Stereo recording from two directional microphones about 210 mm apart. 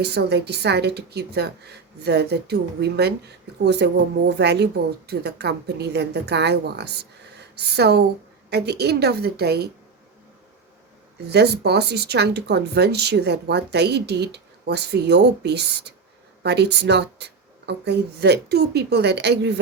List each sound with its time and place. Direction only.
0.0 s speech: 55° right (ahead or behind)
11.3 s speech: 50° right (ahead or behind)